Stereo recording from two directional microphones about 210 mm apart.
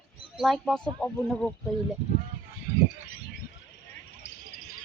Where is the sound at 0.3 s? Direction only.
Centre (ahead or behind).